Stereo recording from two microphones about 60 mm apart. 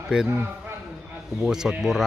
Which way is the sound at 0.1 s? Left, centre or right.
Centre.